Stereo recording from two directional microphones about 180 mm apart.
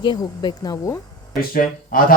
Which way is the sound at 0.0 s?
25° left (ahead or behind).